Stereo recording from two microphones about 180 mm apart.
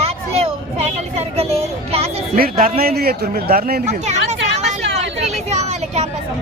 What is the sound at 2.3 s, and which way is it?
A man's voice, 55° right (ahead or behind).